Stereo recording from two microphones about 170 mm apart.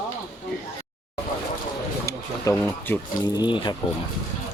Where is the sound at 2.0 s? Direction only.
15° left (ahead or behind).